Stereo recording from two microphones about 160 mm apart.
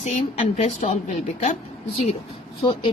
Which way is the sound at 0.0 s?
45° left (ahead or behind).